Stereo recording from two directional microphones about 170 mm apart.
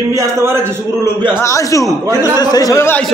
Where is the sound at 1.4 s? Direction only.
20° left (ahead or behind).